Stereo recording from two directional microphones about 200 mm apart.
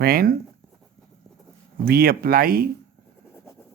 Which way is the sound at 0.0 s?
50° right (ahead or behind).